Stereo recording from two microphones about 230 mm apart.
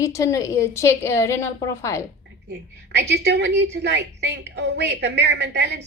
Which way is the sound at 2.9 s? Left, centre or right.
Right.